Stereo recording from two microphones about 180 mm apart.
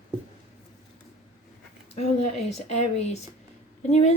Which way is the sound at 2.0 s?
35° left (ahead or behind).